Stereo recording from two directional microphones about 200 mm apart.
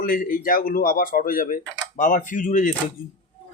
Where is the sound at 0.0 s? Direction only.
45° left (ahead or behind).